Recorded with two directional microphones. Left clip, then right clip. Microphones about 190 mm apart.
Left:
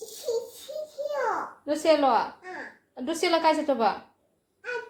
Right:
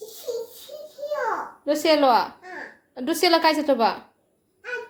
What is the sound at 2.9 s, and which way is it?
A woman's voice, 40° right (ahead or behind).